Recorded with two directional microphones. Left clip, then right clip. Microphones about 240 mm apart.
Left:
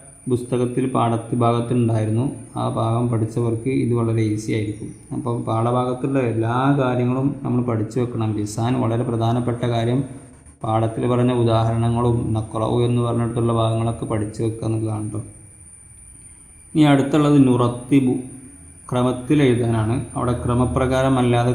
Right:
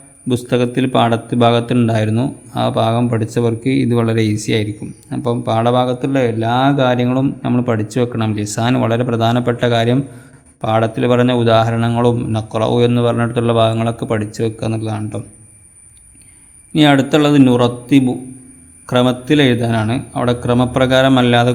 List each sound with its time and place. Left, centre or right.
0.3 s a man's voice: right
16.7 s a man's voice: right